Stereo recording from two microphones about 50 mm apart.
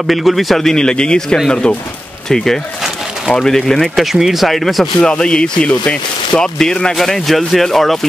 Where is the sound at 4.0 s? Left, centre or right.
Centre.